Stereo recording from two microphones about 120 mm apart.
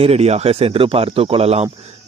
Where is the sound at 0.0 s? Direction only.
60° right (ahead or behind).